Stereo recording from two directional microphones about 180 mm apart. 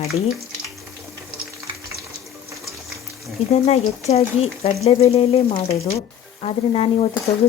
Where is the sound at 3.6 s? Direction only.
35° left (ahead or behind).